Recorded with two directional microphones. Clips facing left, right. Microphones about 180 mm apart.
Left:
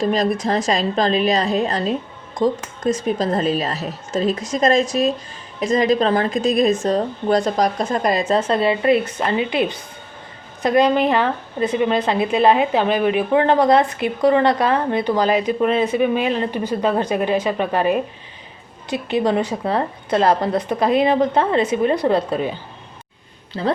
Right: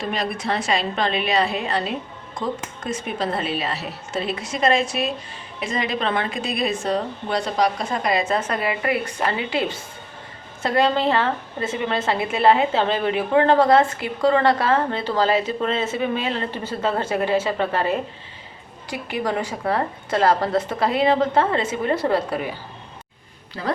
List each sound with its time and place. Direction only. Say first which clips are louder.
0.0 s a woman's voice: left 7 dB; 40° left (ahead or behind)
8.4 s a woman's voice: left 6 dB; 30° left (ahead or behind)
23.6 s a woman's voice: left 6 dB; 25° left (ahead or behind)